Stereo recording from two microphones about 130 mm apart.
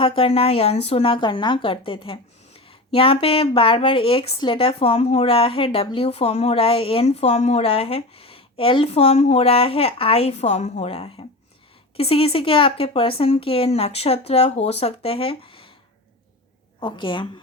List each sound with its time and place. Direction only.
0.0 s speech: 45° left (ahead or behind)
16.8 s a woman's voice: 40° left (ahead or behind)